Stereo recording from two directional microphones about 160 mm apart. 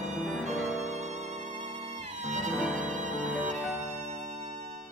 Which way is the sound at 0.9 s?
45° right (ahead or behind).